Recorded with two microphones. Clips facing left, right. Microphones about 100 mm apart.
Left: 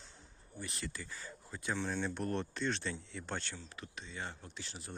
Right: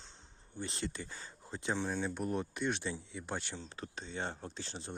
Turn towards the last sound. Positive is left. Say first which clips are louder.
# right 5 dB
turn(degrees=-35)  # may be behind; listen again after turning